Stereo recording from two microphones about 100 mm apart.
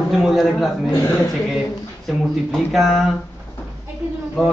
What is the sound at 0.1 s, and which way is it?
Speech, centre (ahead or behind).